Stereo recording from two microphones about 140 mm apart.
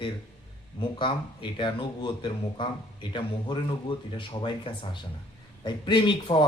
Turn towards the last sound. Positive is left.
turn(degrees=35)  # may be behind; listen again after turning